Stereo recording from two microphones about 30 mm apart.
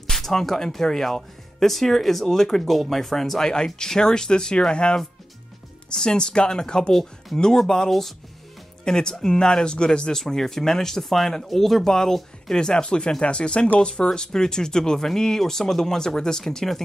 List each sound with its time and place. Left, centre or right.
0.1 s speech: centre
5.9 s speech: left
10.1 s speech: centre
11.8 s speech: centre